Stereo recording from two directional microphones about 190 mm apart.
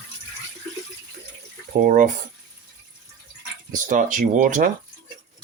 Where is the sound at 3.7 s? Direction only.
45° right (ahead or behind).